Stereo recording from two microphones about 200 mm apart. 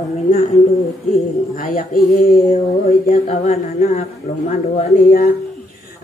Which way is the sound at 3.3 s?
35° left (ahead or behind).